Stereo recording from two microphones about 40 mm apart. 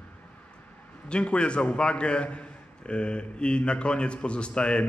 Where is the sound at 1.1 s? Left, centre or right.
Left.